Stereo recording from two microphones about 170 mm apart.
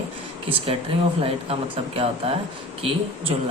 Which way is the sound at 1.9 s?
35° right (ahead or behind).